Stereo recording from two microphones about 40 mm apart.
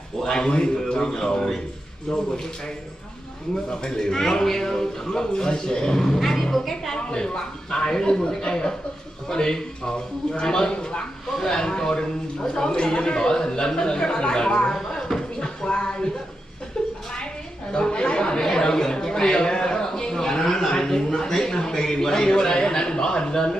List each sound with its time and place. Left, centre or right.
0.2 s speech: centre
3.8 s speech: centre
6.1 s a woman's voice: centre
7.0 s a man's voice: left
11.2 s a man's voice: centre
14.8 s a sound: centre
17.7 s speech: left